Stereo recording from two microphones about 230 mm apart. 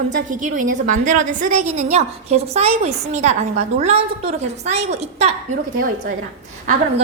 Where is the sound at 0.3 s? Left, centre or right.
Right.